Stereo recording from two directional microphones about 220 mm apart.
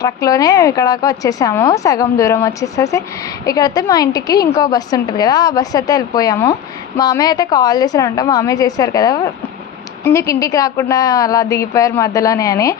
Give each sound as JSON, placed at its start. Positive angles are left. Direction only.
{"t": 0.0, "sound": "a woman's voice", "side_deg": 15}